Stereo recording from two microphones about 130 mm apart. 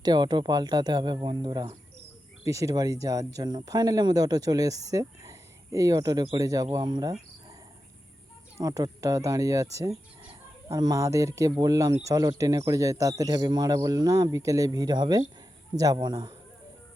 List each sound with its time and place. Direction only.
0.0 s speech: 30° right (ahead or behind)
2.4 s speech: 25° right (ahead or behind)
8.6 s speech: 25° right (ahead or behind)